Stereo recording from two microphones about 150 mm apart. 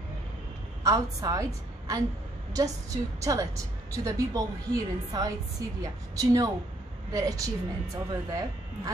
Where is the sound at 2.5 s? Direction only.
25° right (ahead or behind).